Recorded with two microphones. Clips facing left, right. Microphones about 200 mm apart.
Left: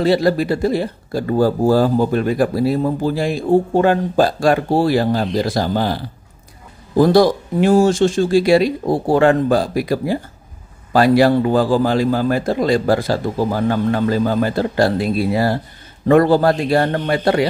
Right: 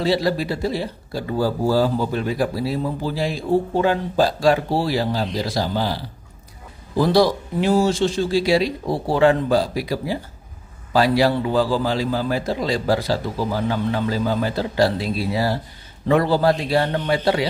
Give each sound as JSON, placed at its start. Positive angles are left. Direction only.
{"t": 0.0, "sound": "speech", "side_deg": 50}
{"t": 7.0, "sound": "speech", "side_deg": 50}